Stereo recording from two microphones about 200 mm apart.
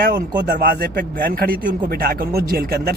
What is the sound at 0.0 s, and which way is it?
Speech, 50° right (ahead or behind).